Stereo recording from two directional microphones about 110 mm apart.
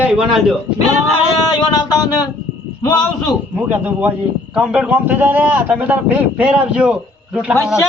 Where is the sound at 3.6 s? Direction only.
15° right (ahead or behind).